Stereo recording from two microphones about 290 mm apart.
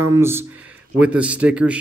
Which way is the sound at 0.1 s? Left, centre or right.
Centre.